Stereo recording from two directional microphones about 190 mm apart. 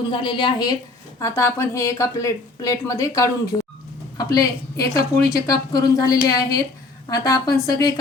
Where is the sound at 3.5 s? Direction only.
25° left (ahead or behind).